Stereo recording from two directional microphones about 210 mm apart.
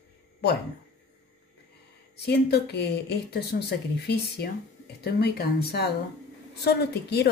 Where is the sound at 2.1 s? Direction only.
50° left (ahead or behind).